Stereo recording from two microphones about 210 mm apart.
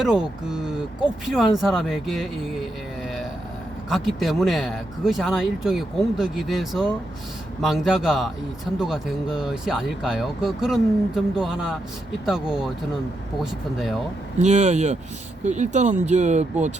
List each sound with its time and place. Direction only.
0.0 s speech: 5° right (ahead or behind)
3.8 s speech: centre (ahead or behind)
14.3 s speech: 35° right (ahead or behind)